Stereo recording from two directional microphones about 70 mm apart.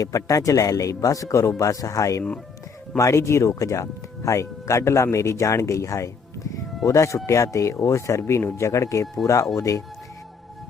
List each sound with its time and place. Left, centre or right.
0.0 s speech: left